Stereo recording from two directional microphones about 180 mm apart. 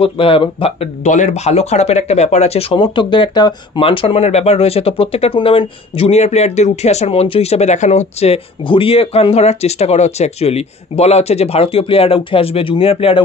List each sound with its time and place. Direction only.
0.0 s speech: 30° left (ahead or behind)